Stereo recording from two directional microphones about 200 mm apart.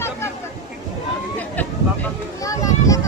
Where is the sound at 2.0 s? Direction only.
15° left (ahead or behind).